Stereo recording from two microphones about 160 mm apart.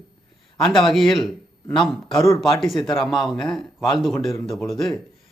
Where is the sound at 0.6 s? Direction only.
30° left (ahead or behind).